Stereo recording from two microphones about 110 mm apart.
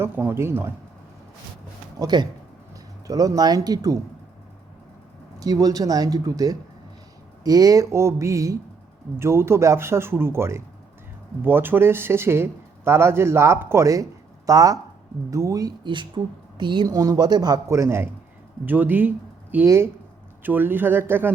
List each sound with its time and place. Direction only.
0.0 s speech: 20° right (ahead or behind)
2.0 s speech: 40° right (ahead or behind)
5.4 s speech: 35° right (ahead or behind)
17.7 s speech: 25° right (ahead or behind)
19.6 s speech: 25° right (ahead or behind)